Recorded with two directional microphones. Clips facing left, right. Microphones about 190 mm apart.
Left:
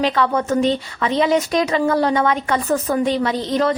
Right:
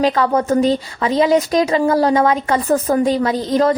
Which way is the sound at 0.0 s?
40° right (ahead or behind).